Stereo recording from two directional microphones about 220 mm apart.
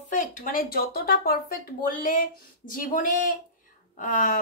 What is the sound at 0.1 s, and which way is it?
A woman's voice, 35° left (ahead or behind).